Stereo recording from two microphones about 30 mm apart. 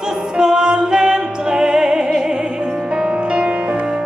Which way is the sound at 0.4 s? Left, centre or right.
Right.